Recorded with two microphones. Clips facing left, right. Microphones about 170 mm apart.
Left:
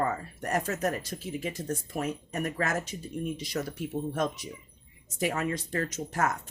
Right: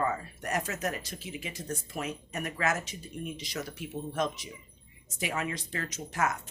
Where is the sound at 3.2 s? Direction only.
50° left (ahead or behind).